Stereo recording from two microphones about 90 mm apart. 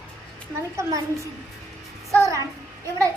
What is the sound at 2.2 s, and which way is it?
Speech, 35° right (ahead or behind).